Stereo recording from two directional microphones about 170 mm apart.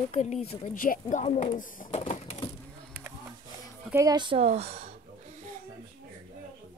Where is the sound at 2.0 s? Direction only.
40° left (ahead or behind).